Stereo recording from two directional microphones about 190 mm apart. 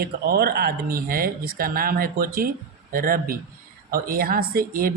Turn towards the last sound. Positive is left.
turn(degrees=-50)  # may be behind; listen again after turning